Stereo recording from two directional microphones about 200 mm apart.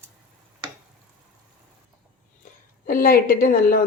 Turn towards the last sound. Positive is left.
turn(degrees=45)  # may be behind; listen again after turning